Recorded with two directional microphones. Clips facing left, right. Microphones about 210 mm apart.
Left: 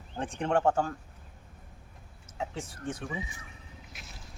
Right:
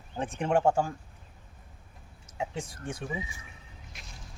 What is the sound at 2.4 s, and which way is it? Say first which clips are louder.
Speech: right 1 dB; 15° right (ahead or behind).